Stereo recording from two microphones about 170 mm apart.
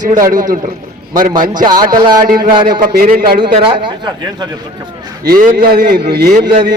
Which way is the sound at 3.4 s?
30° right (ahead or behind).